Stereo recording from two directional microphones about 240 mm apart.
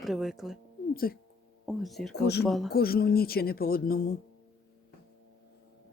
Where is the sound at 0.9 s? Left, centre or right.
Left.